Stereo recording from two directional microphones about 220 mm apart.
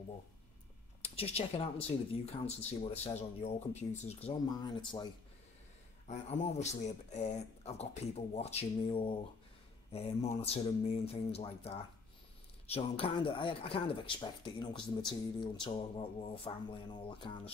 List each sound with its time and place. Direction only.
1.0 s speech: 30° left (ahead or behind)
6.0 s a man's voice: 30° left (ahead or behind)